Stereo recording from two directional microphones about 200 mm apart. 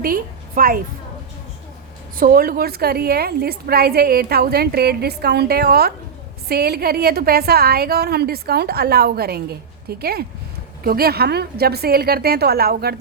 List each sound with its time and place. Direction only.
0.0 s a woman's voice: 45° right (ahead or behind)
2.1 s a woman's voice: 45° right (ahead or behind)